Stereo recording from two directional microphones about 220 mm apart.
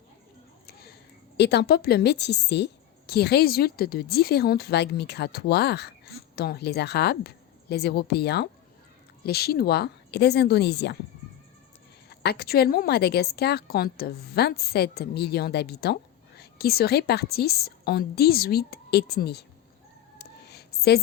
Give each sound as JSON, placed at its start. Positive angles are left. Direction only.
{"t": 1.4, "sound": "a woman's voice", "side_deg": 50}
{"t": 12.0, "sound": "a woman's voice", "side_deg": 45}
{"t": 20.1, "sound": "a sound", "side_deg": 45}